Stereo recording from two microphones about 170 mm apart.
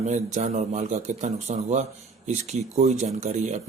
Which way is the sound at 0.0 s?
45° right (ahead or behind).